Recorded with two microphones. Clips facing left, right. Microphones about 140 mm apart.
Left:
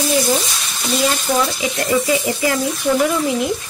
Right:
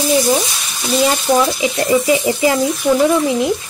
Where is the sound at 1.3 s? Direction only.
15° right (ahead or behind).